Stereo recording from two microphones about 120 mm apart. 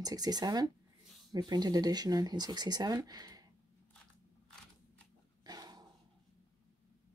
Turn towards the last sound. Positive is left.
turn(degrees=-35)  # may be behind; listen again after turning